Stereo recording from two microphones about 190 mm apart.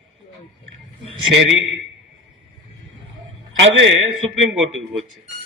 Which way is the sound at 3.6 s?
85° right.